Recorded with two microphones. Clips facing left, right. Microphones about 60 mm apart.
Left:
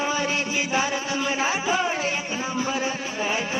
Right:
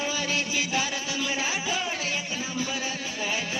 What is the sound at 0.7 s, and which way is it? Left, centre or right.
Music, left.